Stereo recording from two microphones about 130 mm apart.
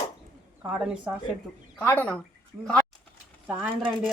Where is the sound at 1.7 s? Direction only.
15° left (ahead or behind).